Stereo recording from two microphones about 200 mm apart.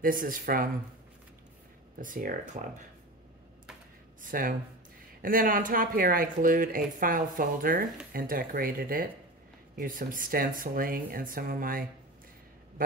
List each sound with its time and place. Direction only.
0.0 s speech: 45° right (ahead or behind)
2.0 s speech: 45° right (ahead or behind)
4.2 s speech: 45° right (ahead or behind)